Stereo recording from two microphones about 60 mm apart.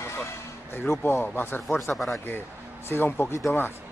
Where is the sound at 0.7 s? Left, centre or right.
Left.